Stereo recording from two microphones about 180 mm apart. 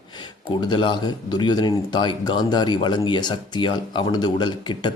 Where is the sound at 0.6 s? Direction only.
25° left (ahead or behind).